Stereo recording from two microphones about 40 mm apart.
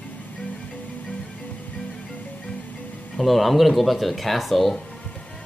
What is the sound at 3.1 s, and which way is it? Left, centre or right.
Speech, centre.